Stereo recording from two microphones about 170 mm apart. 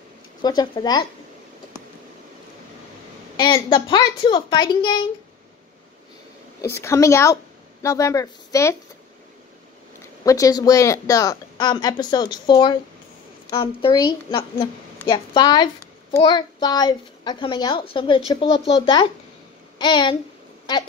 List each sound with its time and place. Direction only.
0.4 s a woman's voice: 25° left (ahead or behind)
3.3 s a woman's voice: 25° left (ahead or behind)
6.7 s a woman's voice: 15° left (ahead or behind)
10.2 s a woman's voice: 20° left (ahead or behind)